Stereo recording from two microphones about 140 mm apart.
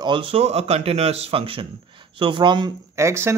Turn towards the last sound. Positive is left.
turn(degrees=-20)  # may be behind; listen again after turning